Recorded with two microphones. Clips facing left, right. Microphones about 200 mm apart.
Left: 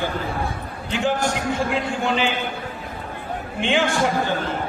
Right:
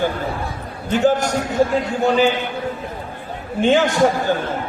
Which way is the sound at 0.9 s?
40° right (ahead or behind).